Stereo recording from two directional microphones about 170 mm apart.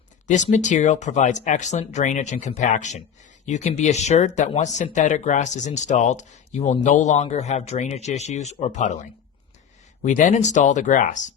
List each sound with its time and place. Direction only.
0.3 s speech: 45° left (ahead or behind)